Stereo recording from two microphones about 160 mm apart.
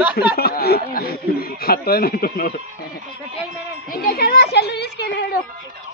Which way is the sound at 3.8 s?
70° left (ahead or behind).